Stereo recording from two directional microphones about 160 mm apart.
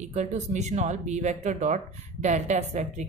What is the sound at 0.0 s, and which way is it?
Speech, 45° right (ahead or behind).